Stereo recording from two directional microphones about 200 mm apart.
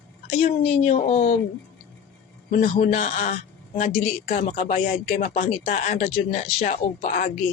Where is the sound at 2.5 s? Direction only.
40° left (ahead or behind).